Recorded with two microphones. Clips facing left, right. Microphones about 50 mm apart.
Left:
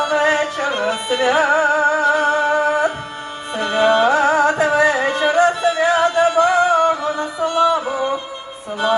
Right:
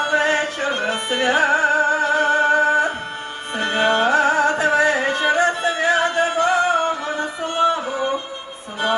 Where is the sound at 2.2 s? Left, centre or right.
Right.